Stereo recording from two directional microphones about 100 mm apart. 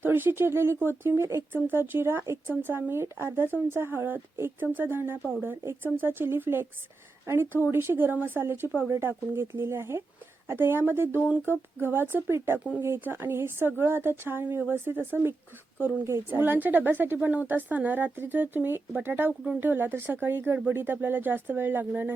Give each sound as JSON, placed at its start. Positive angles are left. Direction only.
{"t": 0.0, "sound": "a woman's voice", "side_deg": -20}